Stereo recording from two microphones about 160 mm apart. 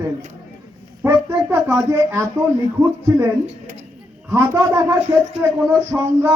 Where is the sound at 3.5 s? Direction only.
50° right (ahead or behind).